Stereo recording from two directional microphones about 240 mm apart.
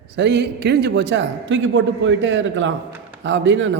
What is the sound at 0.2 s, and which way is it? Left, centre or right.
A man's voice, right.